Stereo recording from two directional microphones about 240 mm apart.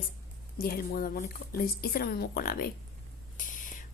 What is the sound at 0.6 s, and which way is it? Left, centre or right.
Speech, left.